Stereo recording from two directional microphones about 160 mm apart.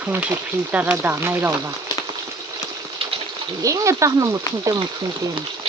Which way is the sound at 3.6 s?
20° right (ahead or behind).